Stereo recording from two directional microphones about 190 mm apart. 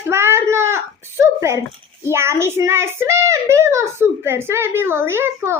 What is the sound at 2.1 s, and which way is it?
A child's voice, 15° right (ahead or behind).